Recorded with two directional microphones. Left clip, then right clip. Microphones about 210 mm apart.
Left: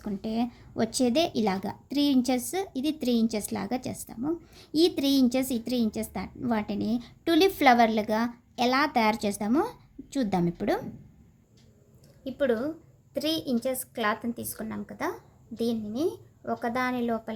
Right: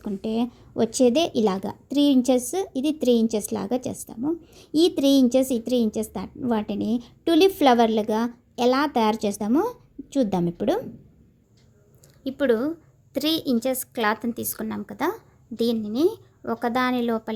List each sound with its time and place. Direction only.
0.0 s a woman's voice: 5° right (ahead or behind)
12.2 s a woman's voice: 40° right (ahead or behind)